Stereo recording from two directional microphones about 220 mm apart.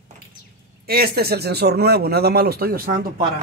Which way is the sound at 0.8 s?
45° right (ahead or behind).